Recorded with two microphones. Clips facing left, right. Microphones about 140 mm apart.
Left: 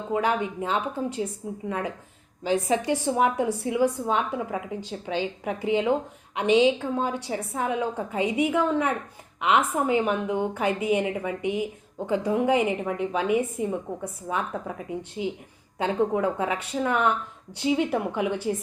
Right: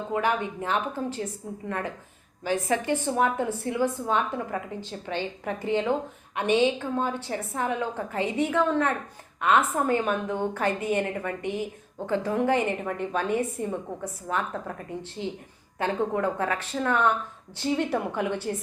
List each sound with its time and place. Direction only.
0.1 s a woman's voice: 20° left (ahead or behind)
7.1 s a woman's voice: 10° left (ahead or behind)